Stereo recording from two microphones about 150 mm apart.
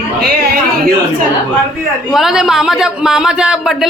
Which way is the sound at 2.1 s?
Centre (ahead or behind).